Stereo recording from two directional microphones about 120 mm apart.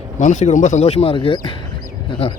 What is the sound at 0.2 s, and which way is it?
Speech, 80° left.